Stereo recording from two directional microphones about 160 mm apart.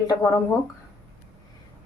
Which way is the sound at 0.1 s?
20° left (ahead or behind).